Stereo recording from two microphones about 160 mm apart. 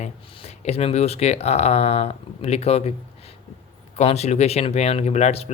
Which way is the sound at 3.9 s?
40° left (ahead or behind).